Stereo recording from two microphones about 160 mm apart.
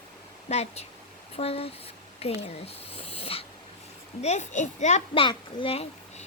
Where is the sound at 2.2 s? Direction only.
40° left (ahead or behind).